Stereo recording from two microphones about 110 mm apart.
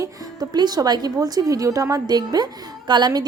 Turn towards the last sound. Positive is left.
turn(degrees=-40)  # may be behind; listen again after turning